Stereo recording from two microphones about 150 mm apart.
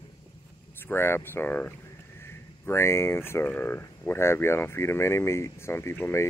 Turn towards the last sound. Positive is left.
turn(degrees=15)  # may be behind; listen again after turning